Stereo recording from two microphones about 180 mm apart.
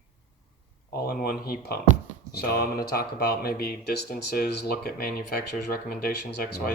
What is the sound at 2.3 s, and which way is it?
Speech, 60° left (ahead or behind).